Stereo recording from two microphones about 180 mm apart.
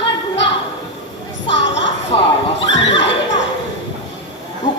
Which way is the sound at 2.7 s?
85° left.